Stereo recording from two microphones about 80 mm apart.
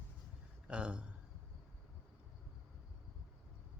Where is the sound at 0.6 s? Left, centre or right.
Centre.